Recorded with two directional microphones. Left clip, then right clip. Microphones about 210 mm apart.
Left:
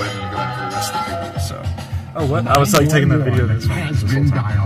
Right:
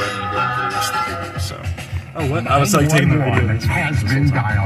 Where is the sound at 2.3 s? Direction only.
15° left (ahead or behind).